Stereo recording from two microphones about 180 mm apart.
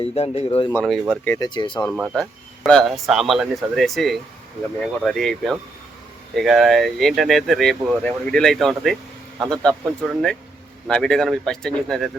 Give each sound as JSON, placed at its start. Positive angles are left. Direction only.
{"t": 0.0, "sound": "speech", "side_deg": 35}
{"t": 0.8, "sound": "speech", "side_deg": 0}
{"t": 1.5, "sound": "speech", "side_deg": 25}
{"t": 2.6, "sound": "speech", "side_deg": 0}